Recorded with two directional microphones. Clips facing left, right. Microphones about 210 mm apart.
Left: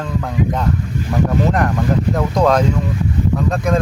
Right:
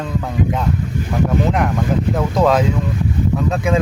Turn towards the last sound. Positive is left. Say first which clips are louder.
# even
turn(degrees=-5)  # may be behind; listen again after turning